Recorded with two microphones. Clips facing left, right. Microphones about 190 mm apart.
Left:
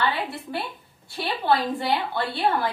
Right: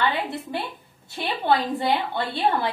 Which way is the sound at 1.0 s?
20° right (ahead or behind).